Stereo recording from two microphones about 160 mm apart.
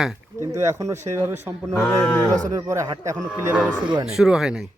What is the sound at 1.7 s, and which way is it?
Speech, 5° left (ahead or behind).